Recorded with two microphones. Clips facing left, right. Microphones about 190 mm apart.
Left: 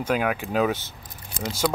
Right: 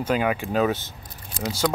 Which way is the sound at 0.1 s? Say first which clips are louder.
Right 1 dB; 5° left (ahead or behind).